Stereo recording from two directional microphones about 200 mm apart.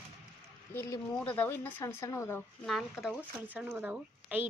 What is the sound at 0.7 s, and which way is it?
Speech, 10° left (ahead or behind).